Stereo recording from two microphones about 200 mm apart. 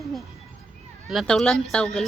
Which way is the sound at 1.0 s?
Centre (ahead or behind).